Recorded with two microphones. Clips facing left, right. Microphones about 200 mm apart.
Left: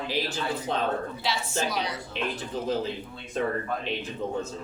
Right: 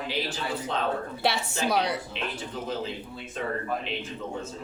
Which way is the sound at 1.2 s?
60° right (ahead or behind).